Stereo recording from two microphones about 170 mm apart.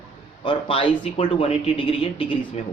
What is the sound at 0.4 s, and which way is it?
Speech, 30° left (ahead or behind).